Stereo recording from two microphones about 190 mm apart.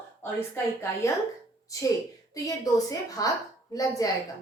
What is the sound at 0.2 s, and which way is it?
Speech, 10° left (ahead or behind).